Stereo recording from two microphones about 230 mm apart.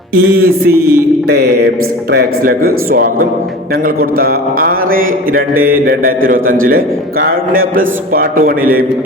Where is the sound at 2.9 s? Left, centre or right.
Right.